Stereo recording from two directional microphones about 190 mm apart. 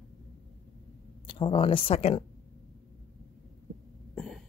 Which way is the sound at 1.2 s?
25° left (ahead or behind).